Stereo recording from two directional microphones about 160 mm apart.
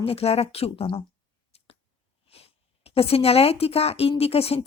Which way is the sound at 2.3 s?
40° left (ahead or behind).